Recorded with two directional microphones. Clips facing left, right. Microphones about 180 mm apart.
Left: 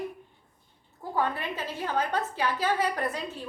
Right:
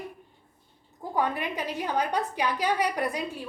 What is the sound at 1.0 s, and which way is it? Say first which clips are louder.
A woman's voice: right 1 dB; 15° right (ahead or behind).